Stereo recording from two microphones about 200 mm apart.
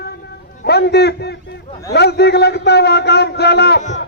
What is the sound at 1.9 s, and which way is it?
A man's voice, 55° left (ahead or behind).